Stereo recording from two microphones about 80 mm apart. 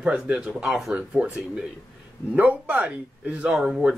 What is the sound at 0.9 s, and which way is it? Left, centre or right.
Speech, centre.